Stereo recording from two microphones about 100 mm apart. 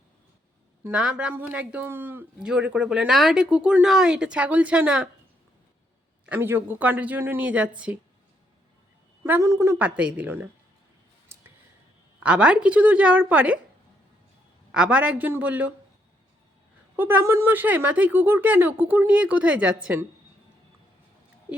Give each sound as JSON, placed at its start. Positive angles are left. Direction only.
{"t": 0.9, "sound": "speech", "side_deg": -10}
{"t": 2.4, "sound": "speech", "side_deg": -10}
{"t": 6.2, "sound": "speech", "side_deg": -20}
{"t": 9.2, "sound": "a woman's voice", "side_deg": -25}
{"t": 9.7, "sound": "speech", "side_deg": -15}
{"t": 11.3, "sound": "a sound", "side_deg": -25}
{"t": 12.2, "sound": "speech", "side_deg": -10}
{"t": 14.7, "sound": "speech", "side_deg": -10}
{"t": 17.0, "sound": "speech", "side_deg": -25}